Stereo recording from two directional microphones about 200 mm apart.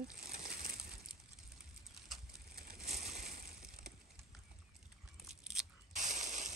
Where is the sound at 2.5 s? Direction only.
50° right (ahead or behind).